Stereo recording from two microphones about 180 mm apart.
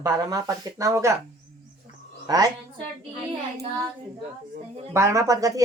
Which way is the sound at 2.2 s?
20° right (ahead or behind).